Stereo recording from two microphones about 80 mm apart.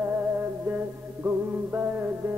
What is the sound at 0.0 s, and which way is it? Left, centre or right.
Music, right.